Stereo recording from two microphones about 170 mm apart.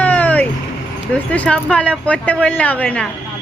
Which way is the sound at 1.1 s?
5° left (ahead or behind).